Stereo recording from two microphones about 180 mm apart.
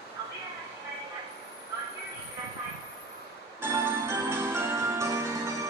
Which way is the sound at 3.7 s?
15° right (ahead or behind).